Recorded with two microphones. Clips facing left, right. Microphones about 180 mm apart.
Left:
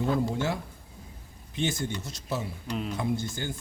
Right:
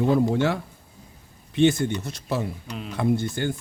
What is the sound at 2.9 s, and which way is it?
Speech, 60° right (ahead or behind).